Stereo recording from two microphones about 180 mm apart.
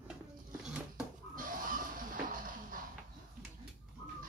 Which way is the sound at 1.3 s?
50° right (ahead or behind).